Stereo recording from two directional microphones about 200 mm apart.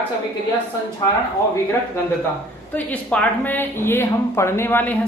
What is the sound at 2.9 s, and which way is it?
A man's voice, 10° left (ahead or behind).